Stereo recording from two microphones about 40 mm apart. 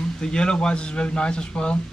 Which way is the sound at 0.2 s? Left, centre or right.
Left.